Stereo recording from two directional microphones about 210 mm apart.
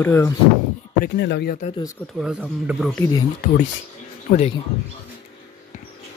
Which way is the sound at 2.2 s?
5° right (ahead or behind).